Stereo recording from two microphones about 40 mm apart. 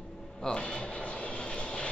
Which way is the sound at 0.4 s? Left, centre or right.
Left.